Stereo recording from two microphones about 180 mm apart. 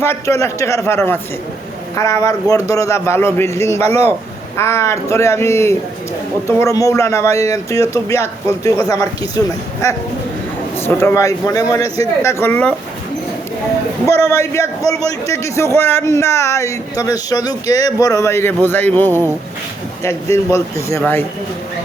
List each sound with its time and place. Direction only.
0.0 s a man's voice: 15° left (ahead or behind)
3.8 s speech: 35° right (ahead or behind)
4.5 s a man's voice: 15° left (ahead or behind)
14.3 s a man's voice: 15° left (ahead or behind)
20.5 s a man's voice: 15° left (ahead or behind)